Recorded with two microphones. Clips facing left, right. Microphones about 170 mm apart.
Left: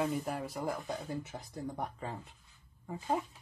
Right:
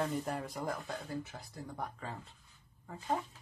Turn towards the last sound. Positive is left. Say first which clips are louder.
# left 2 dB
turn(degrees=10)  # may be behind; listen again after turning